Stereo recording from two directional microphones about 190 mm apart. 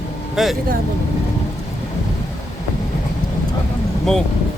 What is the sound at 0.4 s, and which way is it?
Speech, centre (ahead or behind).